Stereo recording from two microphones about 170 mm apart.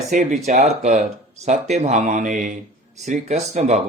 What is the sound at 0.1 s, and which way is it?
Speech, 45° right (ahead or behind).